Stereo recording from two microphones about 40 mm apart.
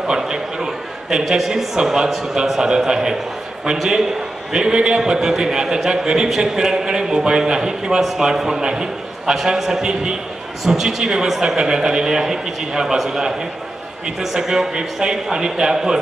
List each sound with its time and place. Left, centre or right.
0.0 s a man's voice: centre
1.1 s a man's voice: centre
1.8 s a man's voice: centre
4.5 s a man's voice: centre
14.2 s a man's voice: centre